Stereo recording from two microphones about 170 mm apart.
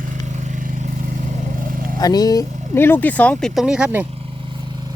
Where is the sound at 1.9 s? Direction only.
25° left (ahead or behind); by 4.1 s 10° right (ahead or behind).